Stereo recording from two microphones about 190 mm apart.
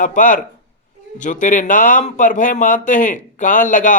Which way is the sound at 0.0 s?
45° left (ahead or behind).